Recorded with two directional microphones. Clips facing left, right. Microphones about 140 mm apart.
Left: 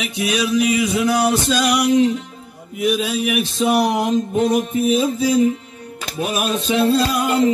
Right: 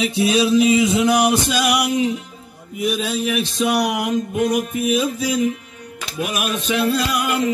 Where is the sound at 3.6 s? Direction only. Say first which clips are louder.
Left 3 dB; 30° left (ahead or behind).